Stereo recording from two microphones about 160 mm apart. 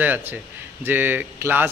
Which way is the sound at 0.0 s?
10° right (ahead or behind).